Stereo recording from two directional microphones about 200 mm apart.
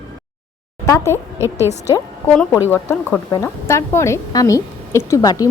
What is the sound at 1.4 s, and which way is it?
Speech, 15° right (ahead or behind).